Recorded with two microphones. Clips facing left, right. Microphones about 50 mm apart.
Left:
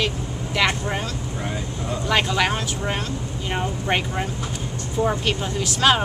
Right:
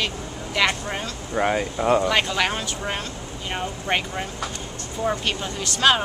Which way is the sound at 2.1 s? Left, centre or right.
Centre.